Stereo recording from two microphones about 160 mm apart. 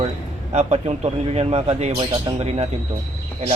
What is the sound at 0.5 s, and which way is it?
Speech, 45° right (ahead or behind).